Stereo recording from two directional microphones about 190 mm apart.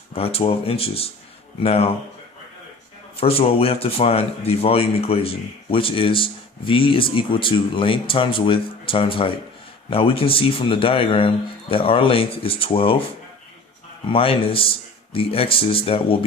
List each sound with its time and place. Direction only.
0.1 s speech: 30° left (ahead or behind)
3.2 s speech: 30° left (ahead or behind)
14.1 s speech: 30° left (ahead or behind)